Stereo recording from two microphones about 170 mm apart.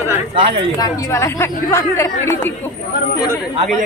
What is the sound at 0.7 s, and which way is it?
A woman's voice, 20° left (ahead or behind).